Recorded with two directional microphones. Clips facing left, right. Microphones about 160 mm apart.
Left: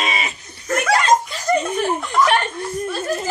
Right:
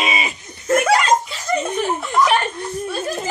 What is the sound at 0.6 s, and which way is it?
Laughter, 25° right (ahead or behind).